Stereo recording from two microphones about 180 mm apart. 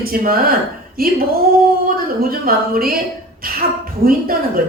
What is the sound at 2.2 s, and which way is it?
Speech, 55° right (ahead or behind).